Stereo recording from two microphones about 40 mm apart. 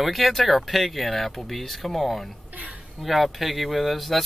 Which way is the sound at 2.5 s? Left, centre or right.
Right.